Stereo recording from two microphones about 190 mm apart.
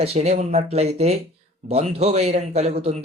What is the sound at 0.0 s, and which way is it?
A man's voice, 35° right (ahead or behind).